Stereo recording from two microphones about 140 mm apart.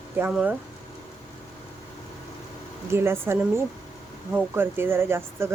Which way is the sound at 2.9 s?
15° right (ahead or behind).